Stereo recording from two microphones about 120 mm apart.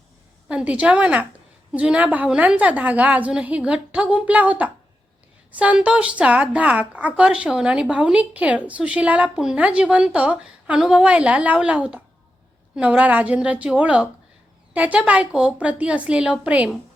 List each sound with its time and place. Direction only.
0.4 s a woman's voice: 10° right (ahead or behind)